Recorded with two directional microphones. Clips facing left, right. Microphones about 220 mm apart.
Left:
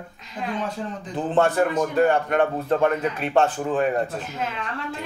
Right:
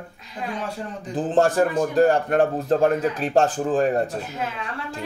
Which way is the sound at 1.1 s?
35° right (ahead or behind).